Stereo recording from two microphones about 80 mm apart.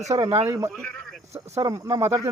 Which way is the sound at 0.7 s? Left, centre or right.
Centre.